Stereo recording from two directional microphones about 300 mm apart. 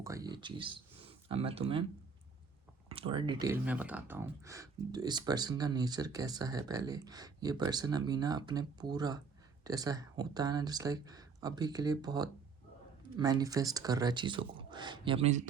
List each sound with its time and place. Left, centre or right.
0.0 s speech: centre
2.9 s speech: centre